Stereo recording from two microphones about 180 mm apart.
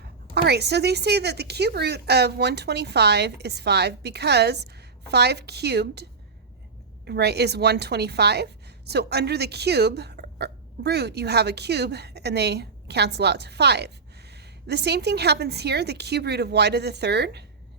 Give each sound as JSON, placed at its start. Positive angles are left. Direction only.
{"t": 0.3, "sound": "a woman's voice", "side_deg": -65}